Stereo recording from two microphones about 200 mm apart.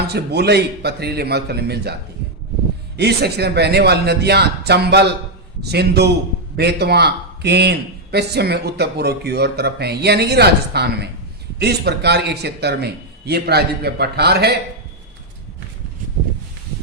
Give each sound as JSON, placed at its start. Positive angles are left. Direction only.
{"t": 0.1, "sound": "a man's voice", "side_deg": -55}
{"t": 3.0, "sound": "a man's voice", "side_deg": -55}